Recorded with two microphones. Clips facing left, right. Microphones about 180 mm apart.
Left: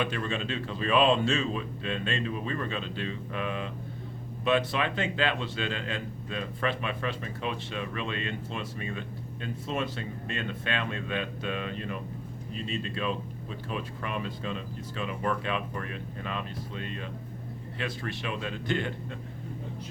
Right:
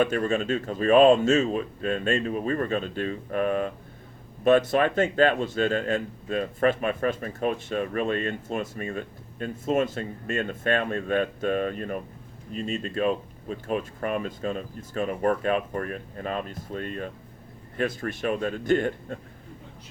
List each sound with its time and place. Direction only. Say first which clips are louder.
0.0 s speech: right 7 dB; 45° right (ahead or behind)